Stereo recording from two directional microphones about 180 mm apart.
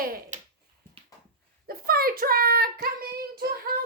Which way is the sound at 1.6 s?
55° right (ahead or behind).